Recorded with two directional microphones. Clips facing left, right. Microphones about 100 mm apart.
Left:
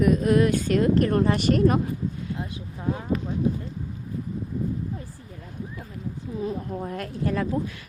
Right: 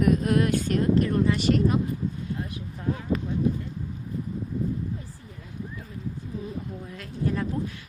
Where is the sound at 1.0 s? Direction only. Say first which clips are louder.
Left 2 dB; 50° left (ahead or behind).